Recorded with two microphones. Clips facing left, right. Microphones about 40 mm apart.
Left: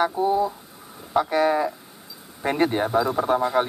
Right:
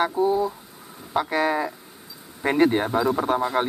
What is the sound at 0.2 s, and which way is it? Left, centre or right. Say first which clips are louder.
Speech: right 2 dB; left.